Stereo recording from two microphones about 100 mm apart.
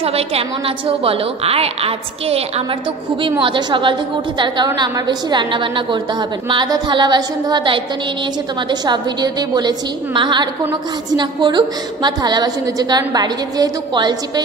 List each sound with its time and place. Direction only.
0.0 s a woman's voice: 85° right
3.2 s a woman's voice: 60° right (ahead or behind)